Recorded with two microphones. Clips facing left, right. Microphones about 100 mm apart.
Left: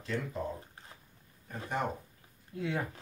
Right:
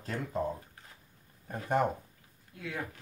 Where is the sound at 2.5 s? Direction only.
25° left (ahead or behind).